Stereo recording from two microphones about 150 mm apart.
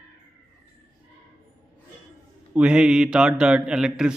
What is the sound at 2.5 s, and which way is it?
A man's voice, 5° right (ahead or behind).